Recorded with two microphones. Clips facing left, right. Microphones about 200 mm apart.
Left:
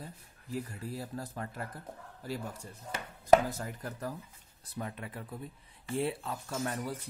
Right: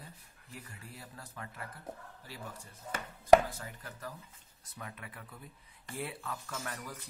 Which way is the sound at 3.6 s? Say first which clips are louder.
Left 7 dB; 40° left (ahead or behind).